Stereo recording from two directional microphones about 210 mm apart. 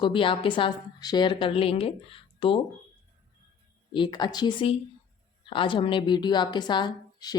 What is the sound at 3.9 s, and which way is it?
A woman's voice, 20° left (ahead or behind).